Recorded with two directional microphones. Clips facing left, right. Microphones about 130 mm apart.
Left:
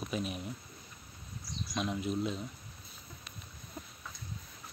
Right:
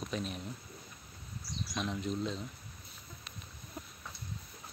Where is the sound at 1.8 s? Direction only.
5° left (ahead or behind).